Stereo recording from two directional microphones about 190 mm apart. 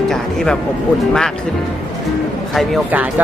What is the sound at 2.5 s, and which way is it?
Speech, 5° right (ahead or behind).